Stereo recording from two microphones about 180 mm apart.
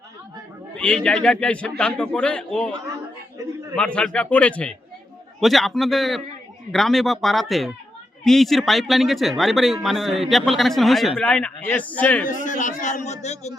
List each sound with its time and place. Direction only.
0.8 s speech: 5° left (ahead or behind)
3.3 s a sound: 15° right (ahead or behind)
3.8 s speech: 5° left (ahead or behind)
12.2 s speech: 45° left (ahead or behind)